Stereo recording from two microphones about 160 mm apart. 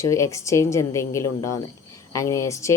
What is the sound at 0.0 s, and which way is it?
Speech, 20° left (ahead or behind).